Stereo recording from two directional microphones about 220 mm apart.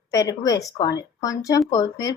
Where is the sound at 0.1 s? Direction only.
15° left (ahead or behind).